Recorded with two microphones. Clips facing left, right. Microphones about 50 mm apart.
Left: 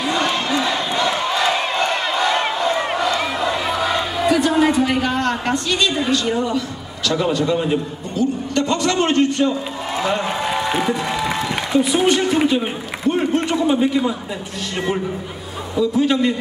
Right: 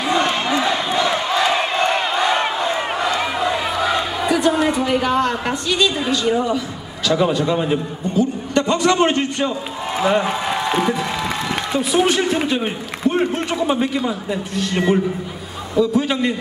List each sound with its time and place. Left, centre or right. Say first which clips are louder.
0.1 s a sound: right 3 dB; centre
0.9 s crowd: even; centre
2.4 s a sound: left 1 dB; centre
4.6 s a woman's voice: left 2 dB; centre
8.2 s a man's voice: right 1 dB; centre
10.2 s a man's voice: even; centre